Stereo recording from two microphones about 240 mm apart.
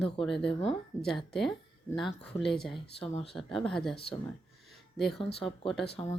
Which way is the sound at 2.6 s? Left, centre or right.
Left.